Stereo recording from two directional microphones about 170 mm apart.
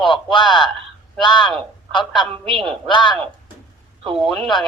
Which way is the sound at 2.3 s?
30° right (ahead or behind).